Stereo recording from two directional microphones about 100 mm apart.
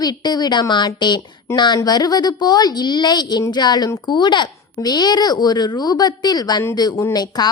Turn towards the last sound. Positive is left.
turn(degrees=45)  # may be behind; listen again after turning